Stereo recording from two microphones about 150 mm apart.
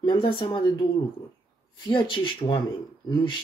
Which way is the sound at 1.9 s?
35° left (ahead or behind).